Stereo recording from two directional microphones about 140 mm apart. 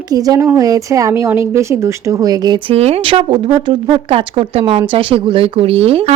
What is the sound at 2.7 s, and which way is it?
Speech, 45° right (ahead or behind).